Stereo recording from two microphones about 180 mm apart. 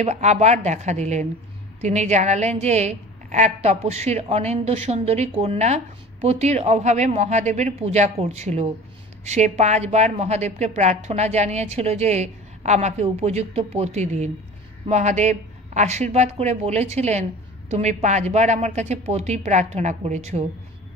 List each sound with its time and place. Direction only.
0.0 s speech: 40° right (ahead or behind)